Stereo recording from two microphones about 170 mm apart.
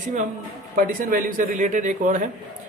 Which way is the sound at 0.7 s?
50° right (ahead or behind).